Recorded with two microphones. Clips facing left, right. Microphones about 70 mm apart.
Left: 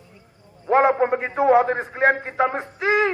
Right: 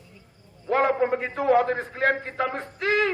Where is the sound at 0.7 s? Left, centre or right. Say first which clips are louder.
Left 4 dB; left.